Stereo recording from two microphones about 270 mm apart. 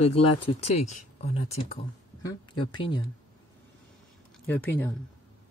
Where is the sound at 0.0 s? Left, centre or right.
Left.